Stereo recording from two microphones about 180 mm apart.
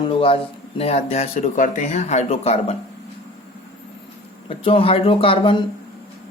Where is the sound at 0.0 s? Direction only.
30° left (ahead or behind).